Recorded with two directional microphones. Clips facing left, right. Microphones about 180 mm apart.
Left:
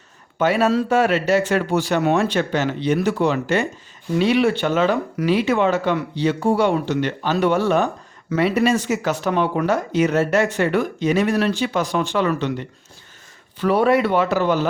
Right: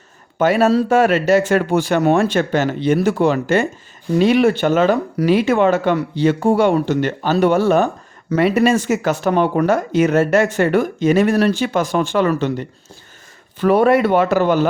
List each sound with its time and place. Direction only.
0.3 s speech: 45° right (ahead or behind)